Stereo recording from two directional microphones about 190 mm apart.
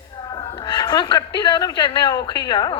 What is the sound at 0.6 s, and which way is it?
A woman's voice, 20° left (ahead or behind).